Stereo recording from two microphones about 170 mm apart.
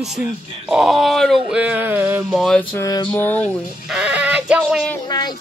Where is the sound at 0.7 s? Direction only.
Centre (ahead or behind).